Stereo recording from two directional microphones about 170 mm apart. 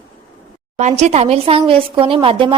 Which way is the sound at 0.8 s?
40° right (ahead or behind).